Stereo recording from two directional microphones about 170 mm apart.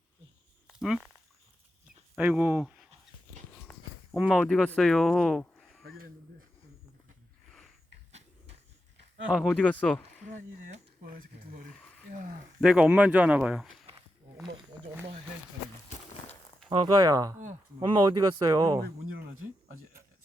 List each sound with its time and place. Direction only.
0.7 s a sound: 5° right (ahead or behind)
2.1 s speech: 10° right (ahead or behind)
3.7 s walk: 10° left (ahead or behind)
4.2 s speech: centre (ahead or behind)
9.2 s speech: centre (ahead or behind)
10.2 s speech: 50° right (ahead or behind)
12.5 s speech: 5° right (ahead or behind)
16.6 s speech: 25° right (ahead or behind)